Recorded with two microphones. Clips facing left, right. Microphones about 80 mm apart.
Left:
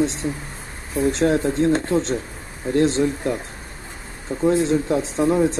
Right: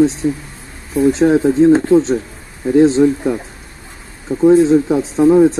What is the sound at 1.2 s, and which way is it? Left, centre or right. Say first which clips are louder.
Speech: right 8 dB; centre.